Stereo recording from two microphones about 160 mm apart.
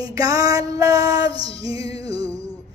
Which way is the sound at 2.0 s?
25° right (ahead or behind).